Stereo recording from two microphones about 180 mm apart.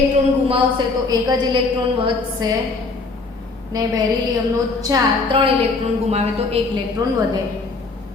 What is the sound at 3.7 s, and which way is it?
A woman's voice, 20° right (ahead or behind).